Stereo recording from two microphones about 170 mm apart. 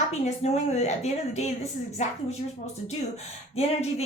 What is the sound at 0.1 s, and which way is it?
A woman's voice, 40° left (ahead or behind).